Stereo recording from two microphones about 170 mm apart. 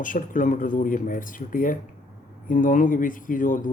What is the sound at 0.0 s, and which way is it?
Speech, 50° left (ahead or behind).